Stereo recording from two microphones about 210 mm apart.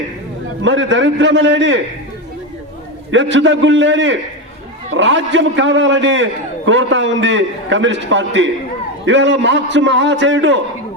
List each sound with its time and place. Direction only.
0.6 s a man's voice: 60° right (ahead or behind)
3.1 s a man's voice: 60° right (ahead or behind)